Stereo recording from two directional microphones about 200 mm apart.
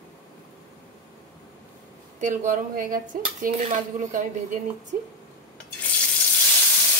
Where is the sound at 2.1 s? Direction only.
40° right (ahead or behind).